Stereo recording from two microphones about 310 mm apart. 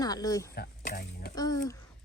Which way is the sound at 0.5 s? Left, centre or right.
Left.